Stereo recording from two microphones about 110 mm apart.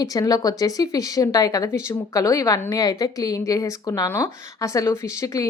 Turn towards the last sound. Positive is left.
turn(degrees=30)  # may be behind; listen again after turning